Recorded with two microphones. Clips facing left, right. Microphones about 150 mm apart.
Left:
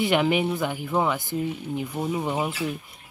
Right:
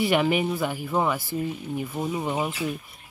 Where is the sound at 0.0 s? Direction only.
Centre (ahead or behind).